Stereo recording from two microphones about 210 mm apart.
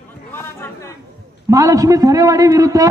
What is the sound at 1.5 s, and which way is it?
A man's voice, 15° right (ahead or behind).